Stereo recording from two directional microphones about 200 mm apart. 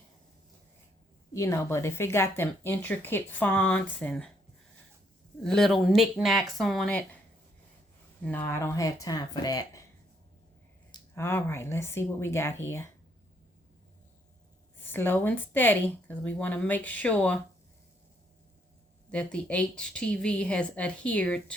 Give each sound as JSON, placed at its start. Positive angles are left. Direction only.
{"t": 1.3, "sound": "speech", "side_deg": 15}
{"t": 5.4, "sound": "a woman's voice", "side_deg": 0}
{"t": 8.2, "sound": "speech", "side_deg": 10}
{"t": 11.1, "sound": "speech", "side_deg": 10}
{"t": 14.9, "sound": "speech", "side_deg": 10}
{"t": 19.1, "sound": "a woman's voice", "side_deg": 5}